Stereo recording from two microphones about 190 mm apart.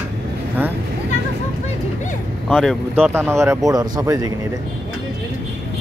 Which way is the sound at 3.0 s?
10° right (ahead or behind).